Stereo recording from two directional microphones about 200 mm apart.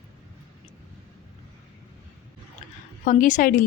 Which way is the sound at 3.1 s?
40° left (ahead or behind).